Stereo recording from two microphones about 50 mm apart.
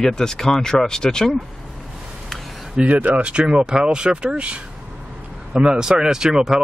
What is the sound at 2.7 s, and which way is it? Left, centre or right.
Speech, right.